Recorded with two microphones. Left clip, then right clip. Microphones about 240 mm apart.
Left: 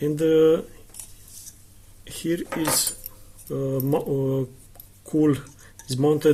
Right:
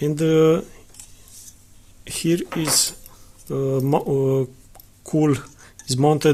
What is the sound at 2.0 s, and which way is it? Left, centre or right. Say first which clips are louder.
Speech: right 5 dB; right.